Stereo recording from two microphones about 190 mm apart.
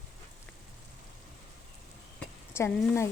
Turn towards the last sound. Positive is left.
turn(degrees=15)  # may be behind; listen again after turning